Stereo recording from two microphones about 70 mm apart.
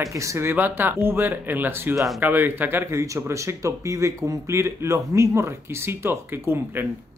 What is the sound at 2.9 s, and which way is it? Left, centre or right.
Speech, right.